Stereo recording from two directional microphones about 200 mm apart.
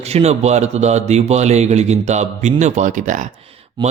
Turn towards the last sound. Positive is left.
turn(degrees=-40)  # may be behind; listen again after turning